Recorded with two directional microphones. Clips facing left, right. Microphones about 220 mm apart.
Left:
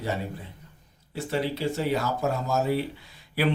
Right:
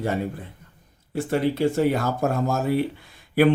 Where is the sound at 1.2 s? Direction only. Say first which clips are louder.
Right 6 dB; 50° right (ahead or behind).